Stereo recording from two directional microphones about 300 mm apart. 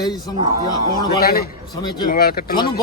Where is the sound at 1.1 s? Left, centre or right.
Left.